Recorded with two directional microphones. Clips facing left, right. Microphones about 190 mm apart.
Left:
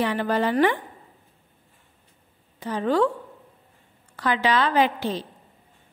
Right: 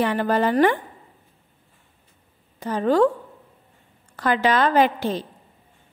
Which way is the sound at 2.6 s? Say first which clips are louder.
Right 3 dB; 45° right (ahead or behind).